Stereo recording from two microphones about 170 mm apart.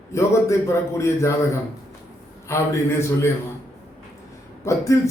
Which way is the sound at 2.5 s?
15° left (ahead or behind).